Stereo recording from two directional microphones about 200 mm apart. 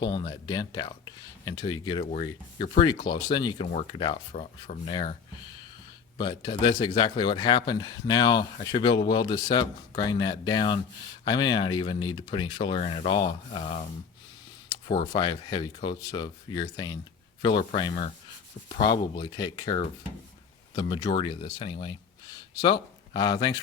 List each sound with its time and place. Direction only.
0.0 s speech: 20° left (ahead or behind)
4.4 s speech: 35° left (ahead or behind)
4.9 s speech: 20° left (ahead or behind)
6.1 s speech: 25° left (ahead or behind)
15.1 s speech: 20° left (ahead or behind)